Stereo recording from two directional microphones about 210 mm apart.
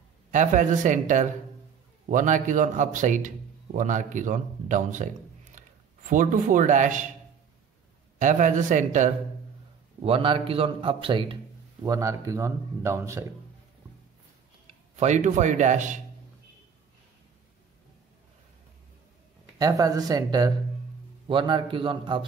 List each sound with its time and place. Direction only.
0.3 s a man's voice: 35° right (ahead or behind)
8.2 s a man's voice: 35° right (ahead or behind); by 13.2 s 15° right (ahead or behind)
14.7 s speech: 35° right (ahead or behind)
19.6 s a man's voice: 15° right (ahead or behind)